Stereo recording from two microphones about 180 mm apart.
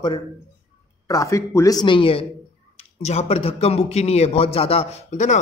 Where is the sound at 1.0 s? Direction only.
20° left (ahead or behind).